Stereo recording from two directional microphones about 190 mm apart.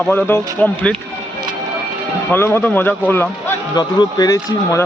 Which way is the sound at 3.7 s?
20° left (ahead or behind).